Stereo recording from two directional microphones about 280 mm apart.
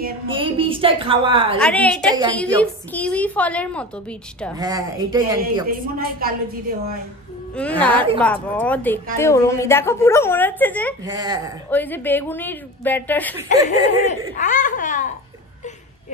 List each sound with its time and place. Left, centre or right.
0.3 s a woman's voice: centre
1.6 s a woman's voice: centre
4.6 s speech: centre
5.7 s a woman's voice: right
7.5 s a woman's voice: centre
11.1 s speech: centre
11.7 s a woman's voice: centre
13.5 s speech: left